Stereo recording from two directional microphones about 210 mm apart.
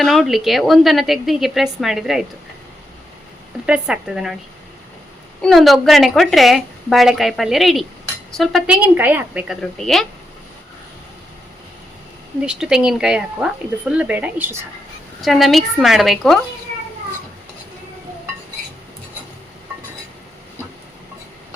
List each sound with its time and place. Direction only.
0.0 s a woman's voice: centre (ahead or behind)
3.7 s a woman's voice: 5° right (ahead or behind)
5.4 s a woman's voice: centre (ahead or behind)
12.5 s a woman's voice: 5° right (ahead or behind)